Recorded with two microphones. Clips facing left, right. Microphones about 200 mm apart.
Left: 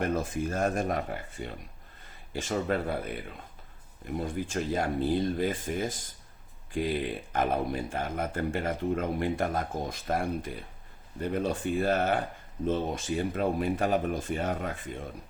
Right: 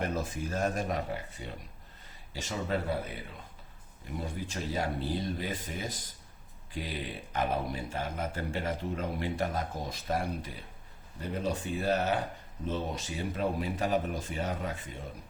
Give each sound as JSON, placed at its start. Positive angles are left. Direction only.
{"t": 0.1, "sound": "speech", "side_deg": 50}
{"t": 4.0, "sound": "speech", "side_deg": 50}